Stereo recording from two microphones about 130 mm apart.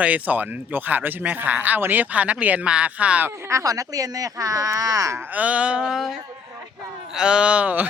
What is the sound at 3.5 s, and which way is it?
Speech, 25° right (ahead or behind).